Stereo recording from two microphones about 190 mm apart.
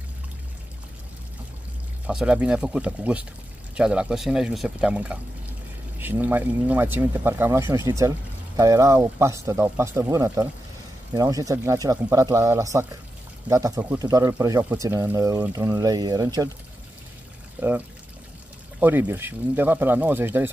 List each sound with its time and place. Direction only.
2.0 s speech: 5° right (ahead or behind)
17.6 s speech: 10° right (ahead or behind)